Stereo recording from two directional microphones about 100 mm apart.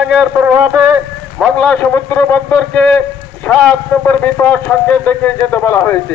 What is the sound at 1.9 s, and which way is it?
Speech, 20° left (ahead or behind).